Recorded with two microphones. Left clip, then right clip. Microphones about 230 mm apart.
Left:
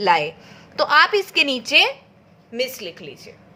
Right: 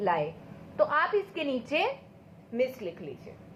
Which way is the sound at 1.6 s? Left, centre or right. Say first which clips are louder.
Left 13 dB; left.